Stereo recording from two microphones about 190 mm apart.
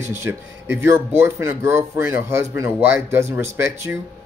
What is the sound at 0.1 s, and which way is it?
Speech, 10° right (ahead or behind).